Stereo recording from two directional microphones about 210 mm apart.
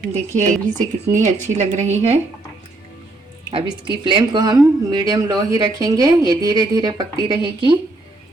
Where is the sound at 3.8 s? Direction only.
25° right (ahead or behind).